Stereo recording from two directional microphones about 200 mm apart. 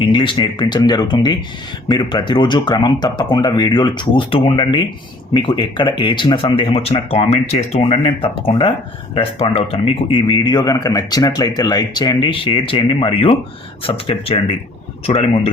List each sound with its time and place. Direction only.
0.0 s a man's voice: 25° left (ahead or behind)